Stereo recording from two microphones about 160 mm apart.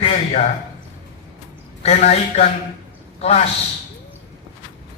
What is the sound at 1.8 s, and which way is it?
A man's voice, 45° left (ahead or behind).